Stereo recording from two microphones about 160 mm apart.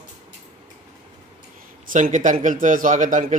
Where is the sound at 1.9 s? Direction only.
50° right (ahead or behind).